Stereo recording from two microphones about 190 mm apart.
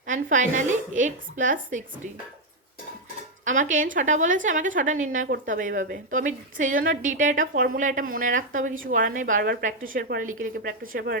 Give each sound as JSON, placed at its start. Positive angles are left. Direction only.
{"t": 0.1, "sound": "a woman's voice", "side_deg": -45}
{"t": 3.4, "sound": "a woman's voice", "side_deg": -40}